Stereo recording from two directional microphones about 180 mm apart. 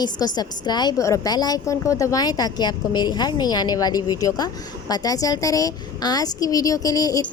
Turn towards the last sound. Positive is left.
turn(degrees=20)  # may be behind; listen again after turning